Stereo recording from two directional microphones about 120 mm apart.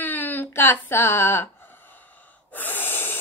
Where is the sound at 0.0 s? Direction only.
15° left (ahead or behind).